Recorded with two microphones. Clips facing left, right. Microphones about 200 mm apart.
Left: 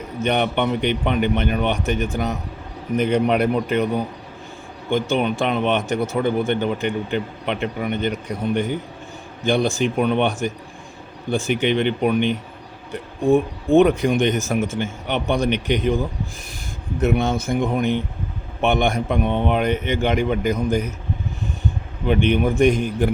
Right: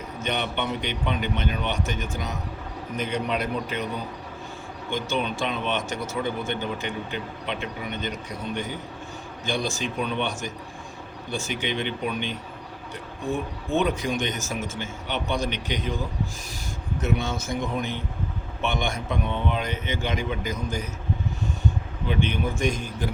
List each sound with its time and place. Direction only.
0.2 s speech: 60° left (ahead or behind)
17.0 s speech: 60° left (ahead or behind)
22.0 s speech: 60° left (ahead or behind)